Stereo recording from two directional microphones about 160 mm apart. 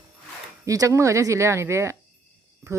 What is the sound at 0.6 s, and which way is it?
Speech, 20° right (ahead or behind).